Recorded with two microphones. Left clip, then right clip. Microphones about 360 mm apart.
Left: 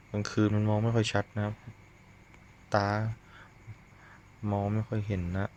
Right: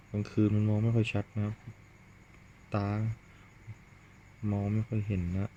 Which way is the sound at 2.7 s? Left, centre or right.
Centre.